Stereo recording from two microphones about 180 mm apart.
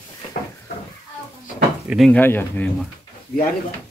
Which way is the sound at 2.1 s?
10° left (ahead or behind).